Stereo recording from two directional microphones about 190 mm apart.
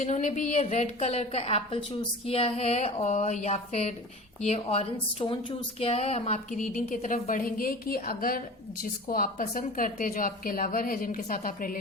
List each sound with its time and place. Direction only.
0.0 s a woman's voice: 40° left (ahead or behind)